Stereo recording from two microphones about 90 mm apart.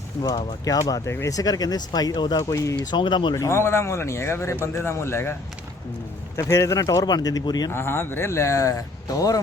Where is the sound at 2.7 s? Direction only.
60° left (ahead or behind).